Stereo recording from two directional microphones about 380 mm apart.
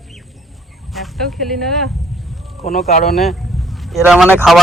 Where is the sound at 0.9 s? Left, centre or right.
Centre.